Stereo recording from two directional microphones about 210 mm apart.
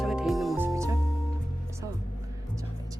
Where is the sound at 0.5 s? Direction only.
10° right (ahead or behind).